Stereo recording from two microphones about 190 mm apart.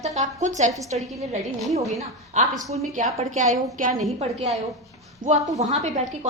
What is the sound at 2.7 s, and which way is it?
A woman's voice, 40° right (ahead or behind).